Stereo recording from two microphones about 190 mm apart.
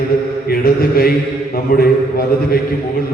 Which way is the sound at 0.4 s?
50° left (ahead or behind).